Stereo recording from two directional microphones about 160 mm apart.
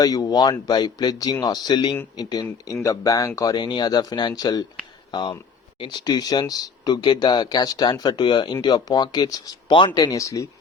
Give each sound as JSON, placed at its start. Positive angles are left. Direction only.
{"t": 0.0, "sound": "speech", "side_deg": 25}